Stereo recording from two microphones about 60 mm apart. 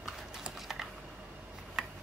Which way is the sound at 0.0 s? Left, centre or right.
Centre.